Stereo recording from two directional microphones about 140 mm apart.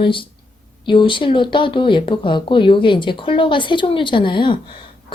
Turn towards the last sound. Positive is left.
turn(degrees=35)  # may be behind; listen again after turning